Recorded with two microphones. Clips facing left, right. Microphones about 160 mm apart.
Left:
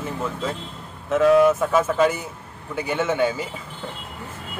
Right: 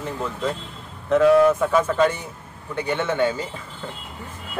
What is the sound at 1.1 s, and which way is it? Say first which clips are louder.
Speech: right 1 dB; centre (ahead or behind).